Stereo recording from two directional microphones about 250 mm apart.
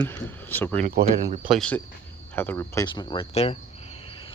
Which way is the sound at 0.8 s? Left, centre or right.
Right.